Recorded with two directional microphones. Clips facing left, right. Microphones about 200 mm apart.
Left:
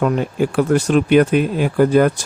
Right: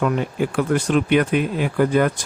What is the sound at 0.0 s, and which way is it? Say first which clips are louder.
Speech: left 3 dB; 40° left (ahead or behind).